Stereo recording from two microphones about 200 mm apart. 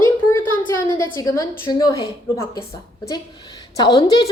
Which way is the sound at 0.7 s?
15° left (ahead or behind).